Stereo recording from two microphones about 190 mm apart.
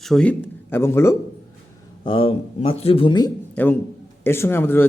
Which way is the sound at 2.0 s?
25° left (ahead or behind).